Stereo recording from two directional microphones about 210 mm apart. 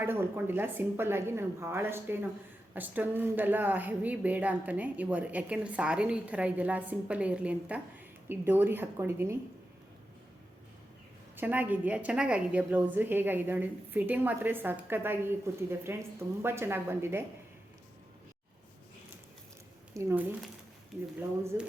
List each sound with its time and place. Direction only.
0.0 s speech: 10° right (ahead or behind)
11.3 s speech: 10° right (ahead or behind)
19.9 s speech: 15° right (ahead or behind)
21.5 s speech: 10° right (ahead or behind)